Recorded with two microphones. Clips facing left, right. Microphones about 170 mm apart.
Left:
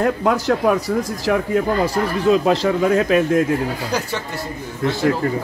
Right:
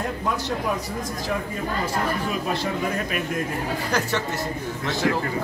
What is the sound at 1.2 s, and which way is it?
A man's voice, 90° left.